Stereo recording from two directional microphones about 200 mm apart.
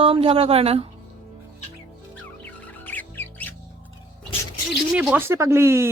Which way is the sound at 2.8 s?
10° left (ahead or behind).